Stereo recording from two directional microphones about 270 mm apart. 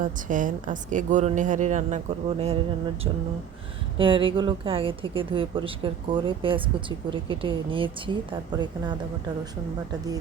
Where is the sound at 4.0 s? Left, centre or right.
Centre.